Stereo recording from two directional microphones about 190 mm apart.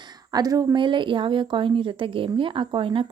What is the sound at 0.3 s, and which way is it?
A woman's voice, 20° right (ahead or behind).